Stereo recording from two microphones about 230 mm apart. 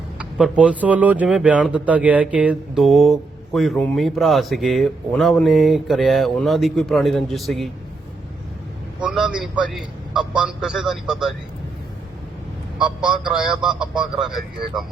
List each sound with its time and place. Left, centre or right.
0.2 s speech: centre
9.0 s speech: centre
13.0 s speech: centre